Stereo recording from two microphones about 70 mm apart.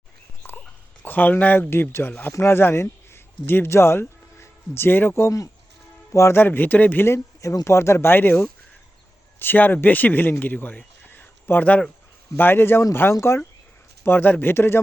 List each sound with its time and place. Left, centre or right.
1.0 s speech: left
6.4 s speech: left
7.0 s speech: left
10.4 s a sound: left
12.4 s speech: left